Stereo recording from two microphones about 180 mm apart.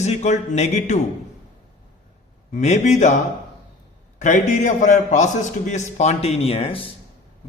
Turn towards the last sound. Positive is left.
turn(degrees=30)  # may be behind; listen again after turning